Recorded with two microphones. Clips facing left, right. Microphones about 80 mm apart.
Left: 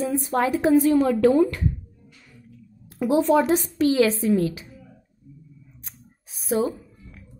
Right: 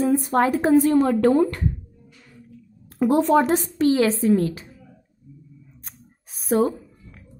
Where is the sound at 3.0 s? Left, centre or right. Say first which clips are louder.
Right 1 dB; right.